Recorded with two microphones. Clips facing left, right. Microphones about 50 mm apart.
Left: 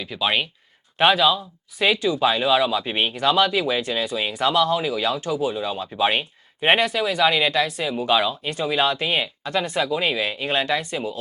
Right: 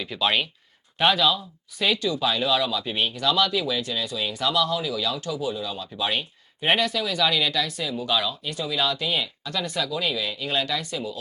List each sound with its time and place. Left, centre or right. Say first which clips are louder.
0.0 s speech: left 1 dB; centre; by 11.2 s left